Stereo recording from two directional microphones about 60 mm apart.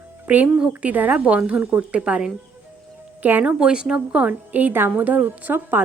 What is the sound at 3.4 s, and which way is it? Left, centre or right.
A woman's voice, centre.